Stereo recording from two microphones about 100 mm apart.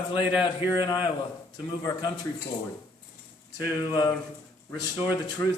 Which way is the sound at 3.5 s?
40° left (ahead or behind).